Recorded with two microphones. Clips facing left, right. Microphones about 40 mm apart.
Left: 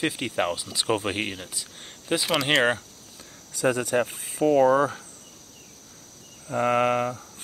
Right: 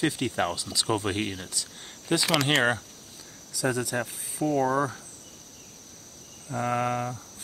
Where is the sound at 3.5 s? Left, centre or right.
Left.